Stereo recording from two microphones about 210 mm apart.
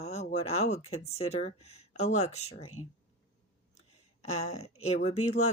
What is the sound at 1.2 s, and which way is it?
Speech, 30° left (ahead or behind).